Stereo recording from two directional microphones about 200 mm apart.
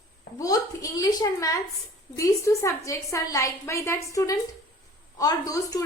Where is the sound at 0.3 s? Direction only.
15° left (ahead or behind).